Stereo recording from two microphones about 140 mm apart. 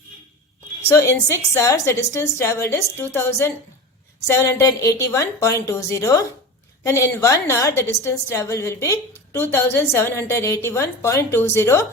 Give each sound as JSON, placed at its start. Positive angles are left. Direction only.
{"t": 0.9, "sound": "a woman's voice", "side_deg": 20}